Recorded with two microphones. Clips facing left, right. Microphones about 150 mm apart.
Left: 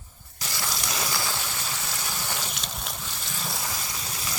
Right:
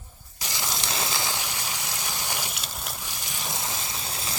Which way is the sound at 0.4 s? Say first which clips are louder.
Even; 20° right (ahead or behind).